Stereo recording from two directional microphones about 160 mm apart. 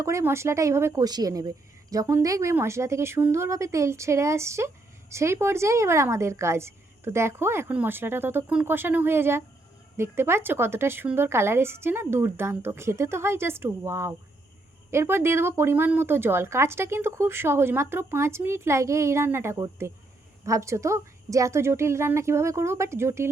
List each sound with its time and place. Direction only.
0.0 s speech: 20° right (ahead or behind)